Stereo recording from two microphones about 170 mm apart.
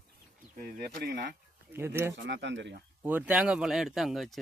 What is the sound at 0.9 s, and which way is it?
Speech, 70° right (ahead or behind).